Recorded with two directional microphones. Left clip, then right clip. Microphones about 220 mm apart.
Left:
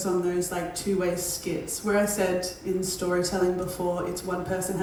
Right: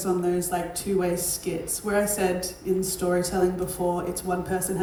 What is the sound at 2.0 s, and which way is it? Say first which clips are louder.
A woman's voice: right 1 dB; 40° right (ahead or behind).